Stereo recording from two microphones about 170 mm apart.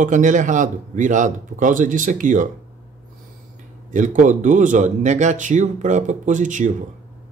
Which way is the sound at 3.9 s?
45° right (ahead or behind).